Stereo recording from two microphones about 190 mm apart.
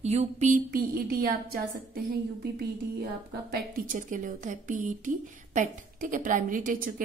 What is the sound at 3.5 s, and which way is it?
A woman's voice, 45° right (ahead or behind).